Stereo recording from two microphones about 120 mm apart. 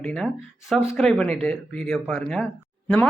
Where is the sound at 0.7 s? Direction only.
5° left (ahead or behind).